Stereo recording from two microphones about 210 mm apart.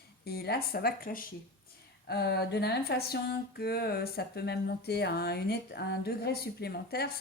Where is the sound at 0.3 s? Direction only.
50° left (ahead or behind).